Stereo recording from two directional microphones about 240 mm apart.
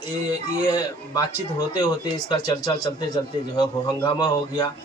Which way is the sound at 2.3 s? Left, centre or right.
Centre.